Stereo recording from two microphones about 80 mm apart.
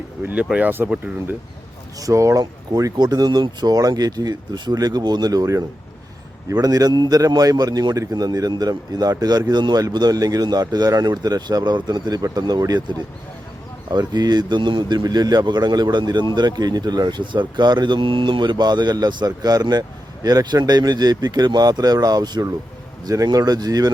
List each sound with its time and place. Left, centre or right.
0.2 s speech: right
2.0 s a man's voice: right
3.8 s a man's voice: right
14.1 s a man's voice: right